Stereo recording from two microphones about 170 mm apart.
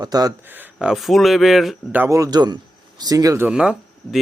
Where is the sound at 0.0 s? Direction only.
20° right (ahead or behind).